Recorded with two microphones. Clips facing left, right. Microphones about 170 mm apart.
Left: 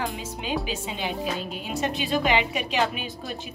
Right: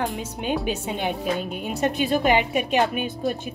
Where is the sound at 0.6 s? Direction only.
55° right (ahead or behind).